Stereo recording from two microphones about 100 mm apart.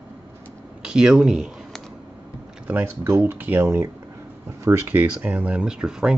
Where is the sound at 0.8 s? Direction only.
10° right (ahead or behind).